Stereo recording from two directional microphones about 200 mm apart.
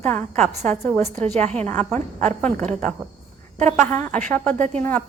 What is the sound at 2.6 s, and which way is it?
Speech, 35° right (ahead or behind).